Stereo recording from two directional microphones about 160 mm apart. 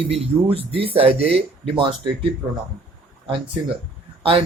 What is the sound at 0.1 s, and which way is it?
Speech, 35° right (ahead or behind).